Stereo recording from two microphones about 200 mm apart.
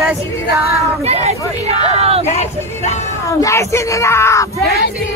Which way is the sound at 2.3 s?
35° left (ahead or behind).